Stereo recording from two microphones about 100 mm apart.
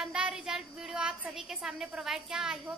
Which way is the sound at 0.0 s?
5° right (ahead or behind).